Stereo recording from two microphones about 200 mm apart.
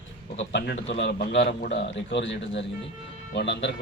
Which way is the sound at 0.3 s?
65° left (ahead or behind).